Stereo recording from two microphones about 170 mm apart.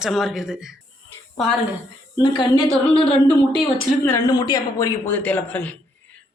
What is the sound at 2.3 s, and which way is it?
Speech, 30° left (ahead or behind).